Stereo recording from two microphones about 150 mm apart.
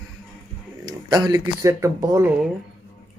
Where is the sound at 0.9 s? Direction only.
30° right (ahead or behind).